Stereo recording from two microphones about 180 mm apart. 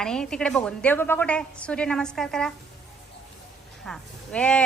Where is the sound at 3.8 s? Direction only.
5° left (ahead or behind).